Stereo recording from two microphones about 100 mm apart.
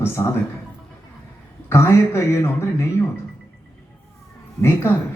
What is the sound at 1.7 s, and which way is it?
A man's voice, 25° left (ahead or behind).